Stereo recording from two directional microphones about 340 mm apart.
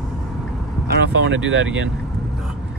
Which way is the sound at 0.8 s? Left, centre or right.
Right.